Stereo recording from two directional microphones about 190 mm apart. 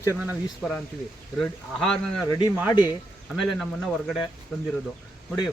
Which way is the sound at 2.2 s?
20° left (ahead or behind).